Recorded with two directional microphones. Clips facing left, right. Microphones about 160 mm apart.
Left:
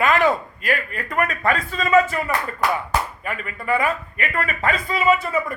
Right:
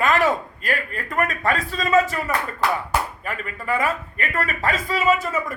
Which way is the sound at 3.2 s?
40° right (ahead or behind).